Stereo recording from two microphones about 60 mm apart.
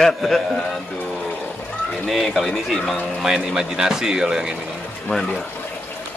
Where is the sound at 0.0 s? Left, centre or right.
Centre.